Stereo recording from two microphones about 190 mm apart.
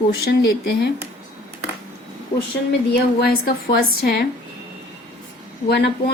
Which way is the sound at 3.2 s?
50° left (ahead or behind).